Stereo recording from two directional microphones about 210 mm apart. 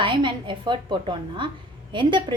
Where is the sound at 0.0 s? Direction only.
20° right (ahead or behind).